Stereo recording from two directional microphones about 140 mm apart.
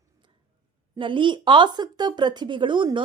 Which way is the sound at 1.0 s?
35° right (ahead or behind).